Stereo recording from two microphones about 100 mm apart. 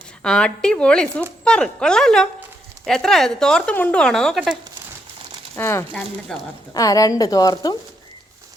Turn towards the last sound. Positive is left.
turn(degrees=45)  # may be behind; listen again after turning